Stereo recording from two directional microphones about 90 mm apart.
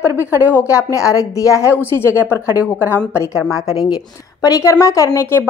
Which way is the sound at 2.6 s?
20° right (ahead or behind).